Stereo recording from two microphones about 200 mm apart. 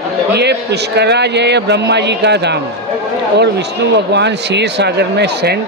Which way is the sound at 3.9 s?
60° right (ahead or behind).